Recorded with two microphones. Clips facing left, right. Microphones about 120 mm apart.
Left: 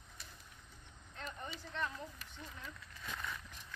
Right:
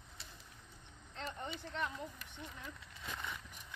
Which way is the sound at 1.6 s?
20° right (ahead or behind).